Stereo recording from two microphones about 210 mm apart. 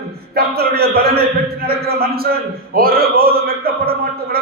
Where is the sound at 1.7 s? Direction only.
50° right (ahead or behind).